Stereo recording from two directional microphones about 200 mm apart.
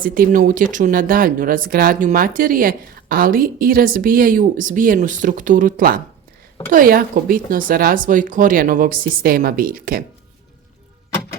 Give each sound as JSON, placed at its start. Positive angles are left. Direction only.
{"t": 0.0, "sound": "speech", "side_deg": -45}